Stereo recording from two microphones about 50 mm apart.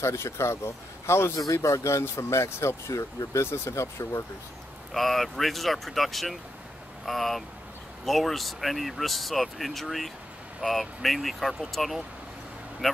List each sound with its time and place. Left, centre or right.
0.0 s speech: left
1.5 s speech: left
4.9 s speech: centre